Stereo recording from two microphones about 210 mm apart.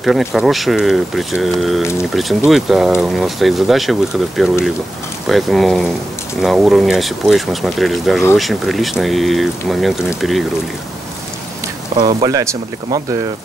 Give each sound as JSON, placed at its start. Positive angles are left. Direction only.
{"t": 0.0, "sound": "speech", "side_deg": 0}
{"t": 12.0, "sound": "speech", "side_deg": -20}